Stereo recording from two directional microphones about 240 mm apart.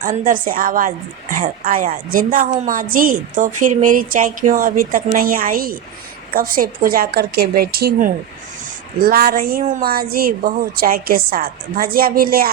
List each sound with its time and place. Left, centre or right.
0.0 s a woman's voice: right